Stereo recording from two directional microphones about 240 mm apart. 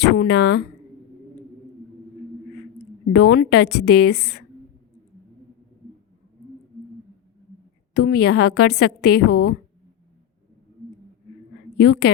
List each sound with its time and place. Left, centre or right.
0.0 s a woman's voice: left
3.1 s a woman's voice: left
7.9 s a woman's voice: left
11.8 s a woman's voice: left